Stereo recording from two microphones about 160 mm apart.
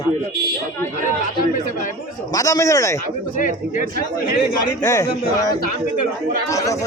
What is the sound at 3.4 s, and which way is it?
Speech, 55° left (ahead or behind).